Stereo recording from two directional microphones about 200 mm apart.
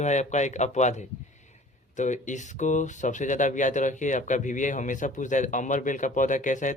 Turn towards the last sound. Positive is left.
turn(degrees=40)  # may be behind; listen again after turning